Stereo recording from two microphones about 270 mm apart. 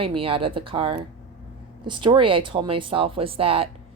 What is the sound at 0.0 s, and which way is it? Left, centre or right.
Speech, centre.